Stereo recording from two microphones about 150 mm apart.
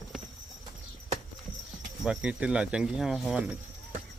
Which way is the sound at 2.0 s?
5° right (ahead or behind).